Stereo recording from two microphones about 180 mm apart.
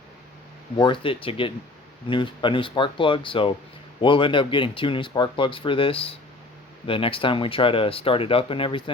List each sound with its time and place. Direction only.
0.8 s speech: 25° left (ahead or behind)